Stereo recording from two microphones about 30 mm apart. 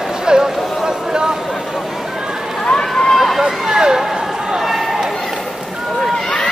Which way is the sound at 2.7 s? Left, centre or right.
Left.